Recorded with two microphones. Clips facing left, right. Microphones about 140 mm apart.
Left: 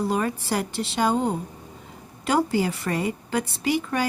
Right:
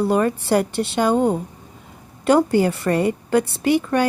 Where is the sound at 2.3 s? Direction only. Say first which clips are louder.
Right 6 dB; 55° right (ahead or behind).